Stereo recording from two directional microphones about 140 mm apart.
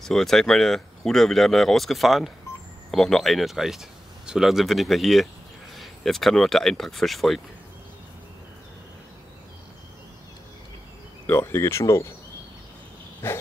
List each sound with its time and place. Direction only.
0.0 s speech: centre (ahead or behind)
11.2 s speech: 15° left (ahead or behind)
13.2 s dog: 15° left (ahead or behind)